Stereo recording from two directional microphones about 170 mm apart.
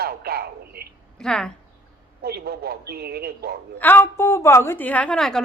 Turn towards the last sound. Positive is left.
turn(degrees=5)  # may be behind; listen again after turning